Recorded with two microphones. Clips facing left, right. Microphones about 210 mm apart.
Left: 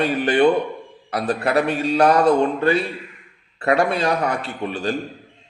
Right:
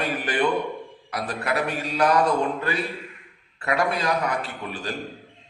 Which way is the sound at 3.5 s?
30° left (ahead or behind).